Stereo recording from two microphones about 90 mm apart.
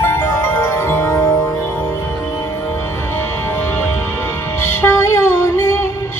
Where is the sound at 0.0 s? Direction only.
25° left (ahead or behind).